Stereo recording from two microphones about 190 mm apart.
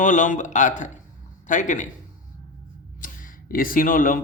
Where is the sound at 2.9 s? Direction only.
45° left (ahead or behind).